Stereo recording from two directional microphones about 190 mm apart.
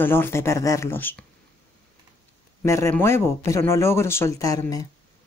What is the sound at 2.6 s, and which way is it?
Speech, 15° left (ahead or behind).